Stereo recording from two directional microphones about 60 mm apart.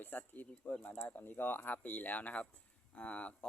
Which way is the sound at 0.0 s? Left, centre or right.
Left.